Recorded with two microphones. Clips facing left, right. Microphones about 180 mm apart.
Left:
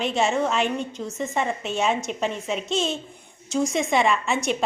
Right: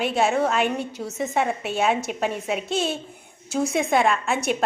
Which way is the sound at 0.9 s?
70° right (ahead or behind).